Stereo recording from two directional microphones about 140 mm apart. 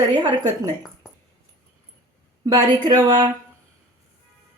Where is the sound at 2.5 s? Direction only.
25° right (ahead or behind).